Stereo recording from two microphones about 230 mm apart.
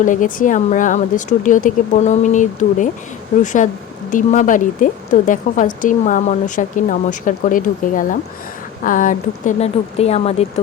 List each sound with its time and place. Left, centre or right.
0.0 s speech: left